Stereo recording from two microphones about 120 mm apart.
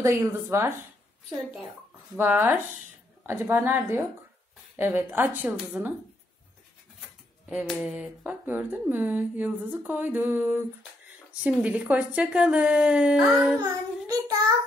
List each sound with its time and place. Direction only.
0.0 s a woman's voice: 25° right (ahead or behind)
2.1 s a woman's voice: 15° right (ahead or behind)
7.9 s speech: 15° right (ahead or behind)
13.6 s child singing: 30° right (ahead or behind)